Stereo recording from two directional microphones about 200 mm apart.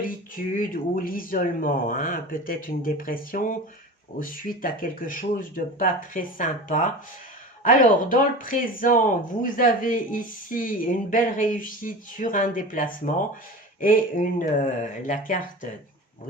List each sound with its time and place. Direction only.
0.0 s speech: 45° left (ahead or behind)